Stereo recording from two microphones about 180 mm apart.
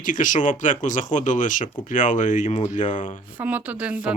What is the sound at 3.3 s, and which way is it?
Speech, 10° right (ahead or behind).